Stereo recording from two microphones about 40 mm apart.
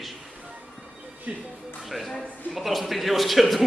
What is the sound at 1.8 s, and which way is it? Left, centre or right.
A man's voice, centre.